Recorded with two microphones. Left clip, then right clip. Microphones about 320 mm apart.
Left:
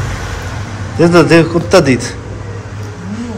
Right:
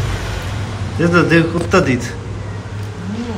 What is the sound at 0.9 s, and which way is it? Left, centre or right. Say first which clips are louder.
A man's voice: left 6 dB; centre.